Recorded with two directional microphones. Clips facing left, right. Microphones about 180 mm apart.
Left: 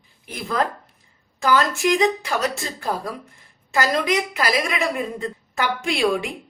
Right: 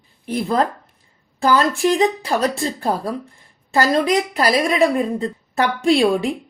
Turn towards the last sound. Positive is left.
turn(degrees=-30)  # may be behind; listen again after turning